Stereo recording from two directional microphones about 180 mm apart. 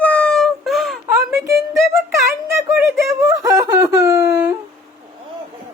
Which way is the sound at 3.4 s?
20° right (ahead or behind).